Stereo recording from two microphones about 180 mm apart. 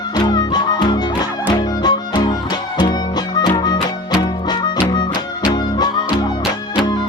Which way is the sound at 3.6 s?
25° left (ahead or behind).